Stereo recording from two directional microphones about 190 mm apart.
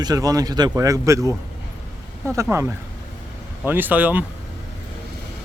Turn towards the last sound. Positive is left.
turn(degrees=-10)  # may be behind; listen again after turning